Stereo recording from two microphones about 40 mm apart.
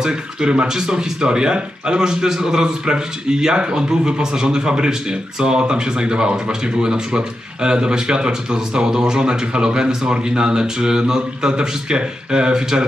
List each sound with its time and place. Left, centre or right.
0.0 s speech: right